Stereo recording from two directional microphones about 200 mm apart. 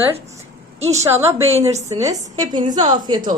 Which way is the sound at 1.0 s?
15° right (ahead or behind).